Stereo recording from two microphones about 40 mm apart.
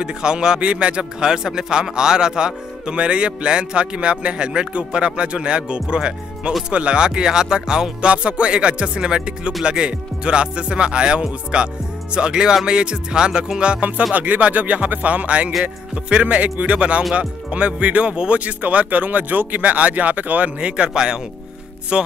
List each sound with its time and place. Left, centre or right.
0.0 s speech: right
1.2 s speech: centre
8.1 s speech: right
18.1 s speech: right
18.4 s speech: right
20.5 s speech: right